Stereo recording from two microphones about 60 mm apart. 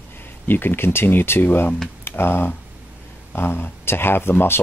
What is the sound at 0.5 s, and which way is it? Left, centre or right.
Speech, left.